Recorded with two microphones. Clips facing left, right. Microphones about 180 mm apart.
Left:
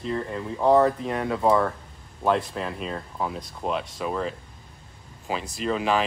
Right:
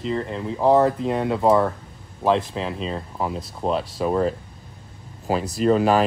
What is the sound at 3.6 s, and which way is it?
Speech, 35° right (ahead or behind).